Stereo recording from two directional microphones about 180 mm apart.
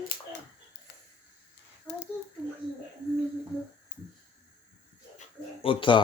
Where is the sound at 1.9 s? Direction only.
10° left (ahead or behind).